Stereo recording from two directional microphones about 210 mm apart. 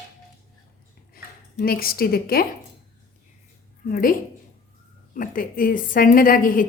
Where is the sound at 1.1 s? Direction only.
45° left (ahead or behind).